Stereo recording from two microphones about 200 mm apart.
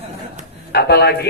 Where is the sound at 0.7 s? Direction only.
55° left (ahead or behind).